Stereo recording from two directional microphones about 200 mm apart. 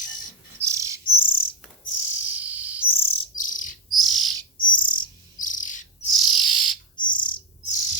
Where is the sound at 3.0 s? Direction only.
30° left (ahead or behind).